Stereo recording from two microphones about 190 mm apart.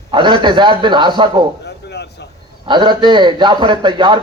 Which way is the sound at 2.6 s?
25° right (ahead or behind).